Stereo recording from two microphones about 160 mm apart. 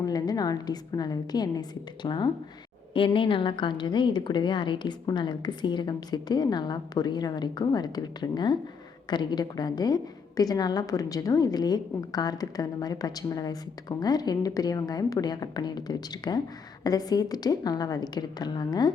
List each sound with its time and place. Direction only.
0.0 s a woman's voice: 25° left (ahead or behind)